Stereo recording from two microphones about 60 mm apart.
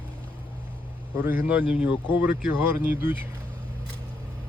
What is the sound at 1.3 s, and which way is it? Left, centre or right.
Speech, right.